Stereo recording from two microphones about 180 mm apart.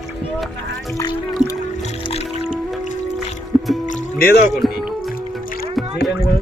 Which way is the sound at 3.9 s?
50° left (ahead or behind).